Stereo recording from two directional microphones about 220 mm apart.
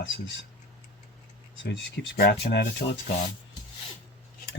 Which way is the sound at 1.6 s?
55° left (ahead or behind).